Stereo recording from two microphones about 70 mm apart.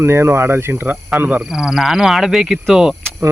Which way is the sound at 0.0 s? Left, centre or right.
Right.